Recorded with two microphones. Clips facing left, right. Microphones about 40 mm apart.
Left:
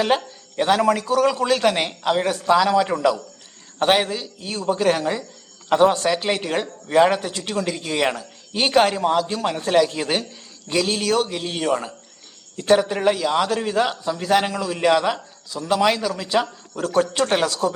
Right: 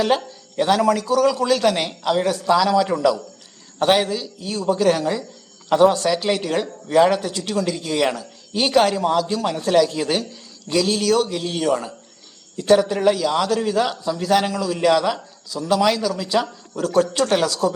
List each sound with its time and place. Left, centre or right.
0.1 s speech: left